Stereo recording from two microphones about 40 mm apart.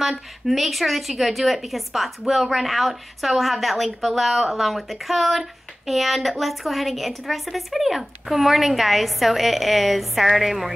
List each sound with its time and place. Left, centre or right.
0.0 s a woman's voice: centre